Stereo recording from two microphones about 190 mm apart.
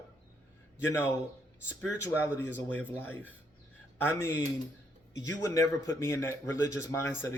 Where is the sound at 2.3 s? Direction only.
10° left (ahead or behind).